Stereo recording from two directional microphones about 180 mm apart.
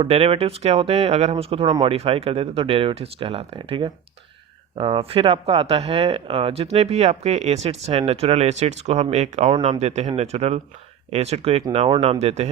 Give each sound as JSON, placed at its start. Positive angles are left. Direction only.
{"t": 0.0, "sound": "speech", "side_deg": -30}